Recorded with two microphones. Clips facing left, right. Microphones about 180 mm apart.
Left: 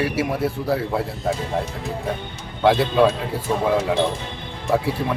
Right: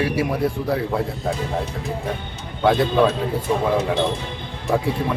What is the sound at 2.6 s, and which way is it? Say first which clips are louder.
Speech: left 1 dB; 5° left (ahead or behind).